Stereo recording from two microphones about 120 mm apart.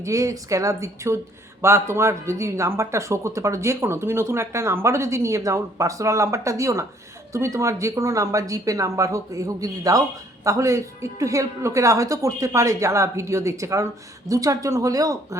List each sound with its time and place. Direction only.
0.0 s speech: 25° right (ahead or behind)